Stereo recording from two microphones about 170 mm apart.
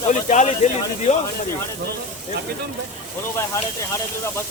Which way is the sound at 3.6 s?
15° left (ahead or behind).